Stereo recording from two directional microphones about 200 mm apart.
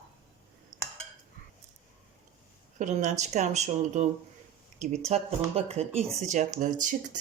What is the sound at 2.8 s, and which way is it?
Speech, 35° right (ahead or behind).